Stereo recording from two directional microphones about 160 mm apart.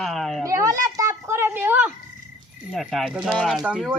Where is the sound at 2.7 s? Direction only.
5° right (ahead or behind).